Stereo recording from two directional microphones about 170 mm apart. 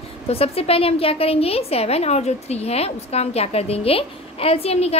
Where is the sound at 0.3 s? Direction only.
35° left (ahead or behind).